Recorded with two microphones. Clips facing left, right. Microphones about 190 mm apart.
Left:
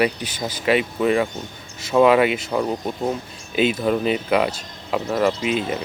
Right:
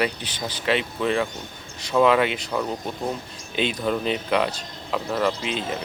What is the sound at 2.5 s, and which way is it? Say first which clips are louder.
Speech: left 4 dB; 20° left (ahead or behind).